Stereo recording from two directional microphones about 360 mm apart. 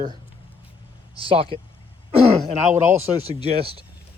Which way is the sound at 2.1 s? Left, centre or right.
Centre.